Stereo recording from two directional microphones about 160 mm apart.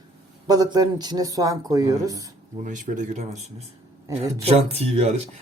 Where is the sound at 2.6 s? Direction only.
50° right (ahead or behind).